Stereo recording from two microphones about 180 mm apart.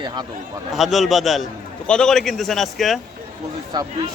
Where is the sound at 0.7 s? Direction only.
Centre (ahead or behind).